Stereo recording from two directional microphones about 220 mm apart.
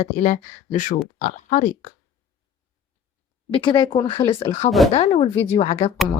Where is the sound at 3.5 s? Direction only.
20° left (ahead or behind).